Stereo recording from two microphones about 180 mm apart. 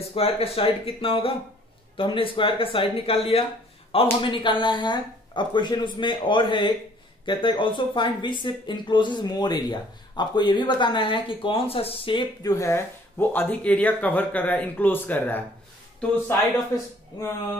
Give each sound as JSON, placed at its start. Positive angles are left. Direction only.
{"t": 0.1, "sound": "speech", "side_deg": 30}